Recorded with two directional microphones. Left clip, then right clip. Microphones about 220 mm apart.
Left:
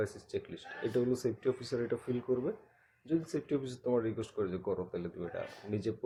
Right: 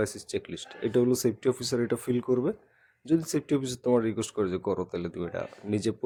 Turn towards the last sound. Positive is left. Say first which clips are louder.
# right 7 dB
turn(degrees=-50)  # may be behind; listen again after turning